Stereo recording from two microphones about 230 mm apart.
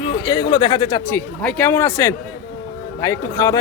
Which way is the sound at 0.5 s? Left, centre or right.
Centre.